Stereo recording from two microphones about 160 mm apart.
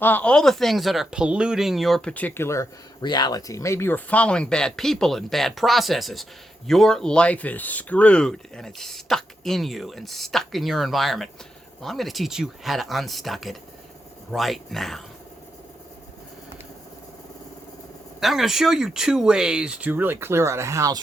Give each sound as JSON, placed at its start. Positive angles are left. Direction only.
{"t": 0.0, "sound": "speech", "side_deg": 10}
{"t": 18.2, "sound": "speech", "side_deg": 0}